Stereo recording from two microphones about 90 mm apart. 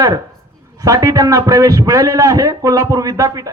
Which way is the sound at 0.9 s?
45° right (ahead or behind).